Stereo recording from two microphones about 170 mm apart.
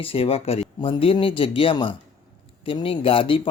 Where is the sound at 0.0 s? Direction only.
35° left (ahead or behind).